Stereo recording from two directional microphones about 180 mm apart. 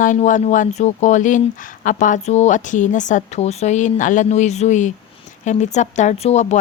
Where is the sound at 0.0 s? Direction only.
45° left (ahead or behind).